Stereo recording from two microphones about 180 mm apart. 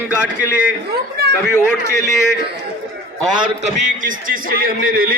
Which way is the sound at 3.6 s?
45° right (ahead or behind).